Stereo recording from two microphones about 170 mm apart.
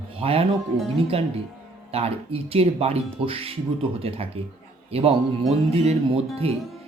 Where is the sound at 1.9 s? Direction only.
35° right (ahead or behind).